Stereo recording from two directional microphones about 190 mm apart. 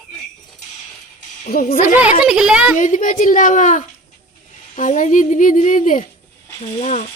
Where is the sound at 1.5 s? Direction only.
45° left (ahead or behind).